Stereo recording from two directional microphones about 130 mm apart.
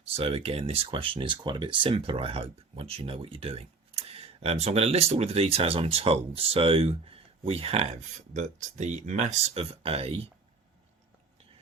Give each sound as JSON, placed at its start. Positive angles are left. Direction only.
{"t": 0.0, "sound": "speech", "side_deg": -50}
{"t": 8.3, "sound": "speech", "side_deg": -65}